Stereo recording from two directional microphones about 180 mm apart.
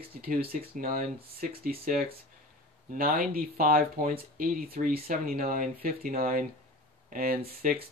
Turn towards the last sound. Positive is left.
turn(degrees=-55)  # may be behind; listen again after turning